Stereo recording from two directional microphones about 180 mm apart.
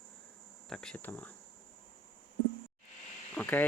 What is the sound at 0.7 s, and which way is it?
Speech, 5° left (ahead or behind).